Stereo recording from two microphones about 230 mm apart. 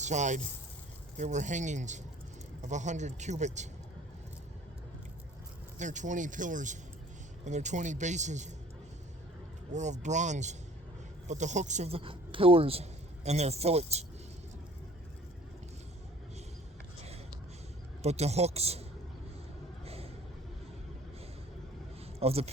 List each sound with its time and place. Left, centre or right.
0.0 s a man's voice: right
5.7 s a man's voice: right
9.7 s a man's voice: right
18.0 s speech: right
19.8 s vehicle: right
22.2 s speech: right